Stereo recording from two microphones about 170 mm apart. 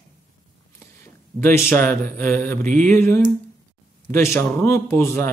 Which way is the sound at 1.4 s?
15° left (ahead or behind).